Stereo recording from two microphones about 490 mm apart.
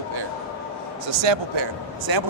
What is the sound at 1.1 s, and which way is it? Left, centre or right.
Speech, right.